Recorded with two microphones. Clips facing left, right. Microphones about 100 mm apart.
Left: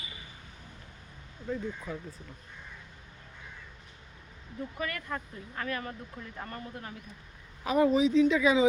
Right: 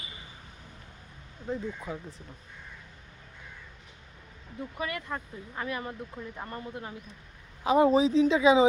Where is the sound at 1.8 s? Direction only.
20° right (ahead or behind).